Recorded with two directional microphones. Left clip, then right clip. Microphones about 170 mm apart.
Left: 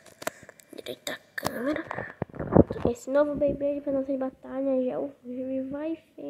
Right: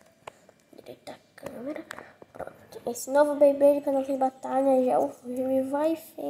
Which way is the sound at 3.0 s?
Centre (ahead or behind).